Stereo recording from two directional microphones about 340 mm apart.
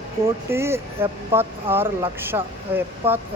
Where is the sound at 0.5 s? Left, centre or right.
Centre.